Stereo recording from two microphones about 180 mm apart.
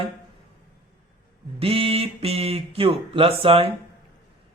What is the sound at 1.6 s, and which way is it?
A man's voice, 30° right (ahead or behind).